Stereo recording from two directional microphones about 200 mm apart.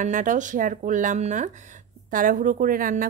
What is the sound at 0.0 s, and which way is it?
Speech, 40° right (ahead or behind).